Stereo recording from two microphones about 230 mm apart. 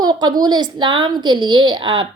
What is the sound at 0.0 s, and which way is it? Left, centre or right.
A woman's voice, centre.